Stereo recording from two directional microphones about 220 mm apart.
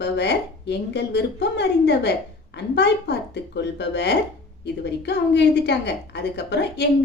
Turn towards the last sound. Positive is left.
turn(degrees=50)  # may be behind; listen again after turning